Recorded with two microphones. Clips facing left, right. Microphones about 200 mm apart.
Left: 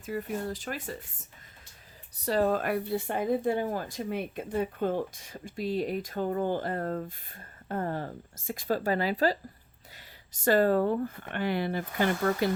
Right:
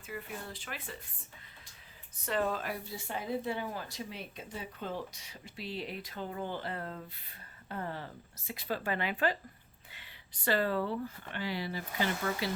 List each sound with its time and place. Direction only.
0.0 s speech: 40° left (ahead or behind)
2.1 s speech: 35° left (ahead or behind)
2.6 s speech: 60° left (ahead or behind)